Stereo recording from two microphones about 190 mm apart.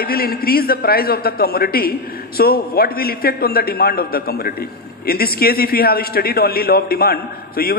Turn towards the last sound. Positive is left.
turn(degrees=55)  # may be behind; listen again after turning